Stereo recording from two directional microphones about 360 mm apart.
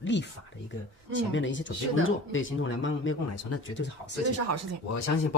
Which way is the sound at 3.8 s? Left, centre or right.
Left.